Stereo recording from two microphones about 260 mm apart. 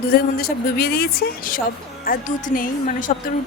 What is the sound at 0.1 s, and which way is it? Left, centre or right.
Speech, left.